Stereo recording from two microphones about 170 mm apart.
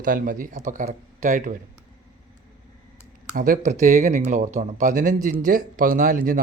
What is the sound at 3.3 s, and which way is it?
Speech, 50° right (ahead or behind).